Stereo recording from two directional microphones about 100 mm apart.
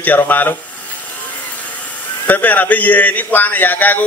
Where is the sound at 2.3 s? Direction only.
20° left (ahead or behind).